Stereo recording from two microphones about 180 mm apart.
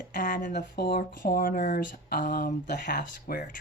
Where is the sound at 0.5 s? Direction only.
65° left (ahead or behind).